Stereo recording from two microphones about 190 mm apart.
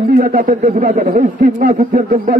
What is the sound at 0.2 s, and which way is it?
A man's voice, 50° right (ahead or behind).